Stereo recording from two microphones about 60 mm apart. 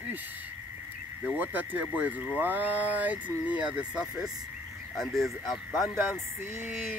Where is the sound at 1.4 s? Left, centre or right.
Right; by 4.3 s centre.